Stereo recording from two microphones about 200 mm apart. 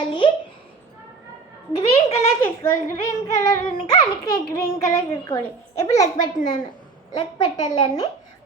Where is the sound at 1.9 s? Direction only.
30° left (ahead or behind).